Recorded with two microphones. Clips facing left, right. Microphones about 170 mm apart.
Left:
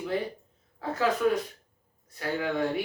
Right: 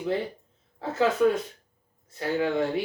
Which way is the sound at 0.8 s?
25° right (ahead or behind).